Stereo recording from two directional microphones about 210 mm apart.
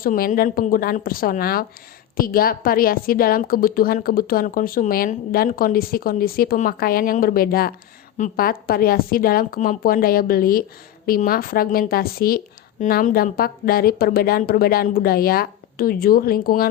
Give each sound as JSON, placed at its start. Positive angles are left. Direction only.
{"t": 0.0, "sound": "a woman's voice", "side_deg": 40}